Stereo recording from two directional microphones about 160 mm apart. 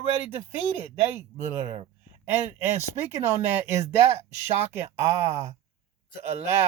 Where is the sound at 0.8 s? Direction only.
15° right (ahead or behind).